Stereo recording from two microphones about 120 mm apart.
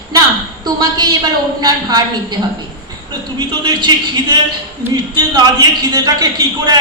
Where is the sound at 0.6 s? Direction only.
35° right (ahead or behind).